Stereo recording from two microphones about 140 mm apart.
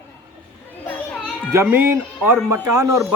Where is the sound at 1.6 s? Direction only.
15° right (ahead or behind).